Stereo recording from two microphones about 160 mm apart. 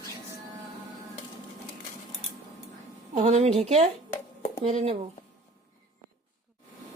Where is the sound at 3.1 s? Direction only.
40° right (ahead or behind).